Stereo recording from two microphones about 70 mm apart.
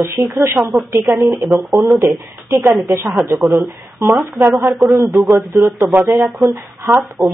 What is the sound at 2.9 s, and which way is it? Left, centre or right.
Speech, right.